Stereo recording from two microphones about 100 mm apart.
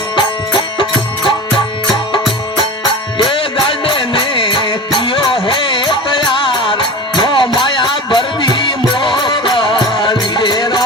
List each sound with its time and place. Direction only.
0.2 s music: 55° left (ahead or behind)
3.2 s music: 60° left (ahead or behind)